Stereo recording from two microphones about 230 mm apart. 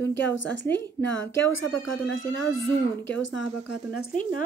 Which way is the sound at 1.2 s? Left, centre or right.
Left.